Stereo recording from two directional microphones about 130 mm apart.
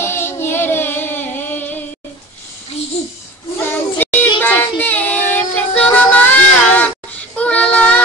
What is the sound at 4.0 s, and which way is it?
Child singing, 15° left (ahead or behind).